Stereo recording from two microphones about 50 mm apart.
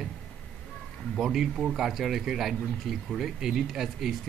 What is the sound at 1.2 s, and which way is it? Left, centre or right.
Speech, centre.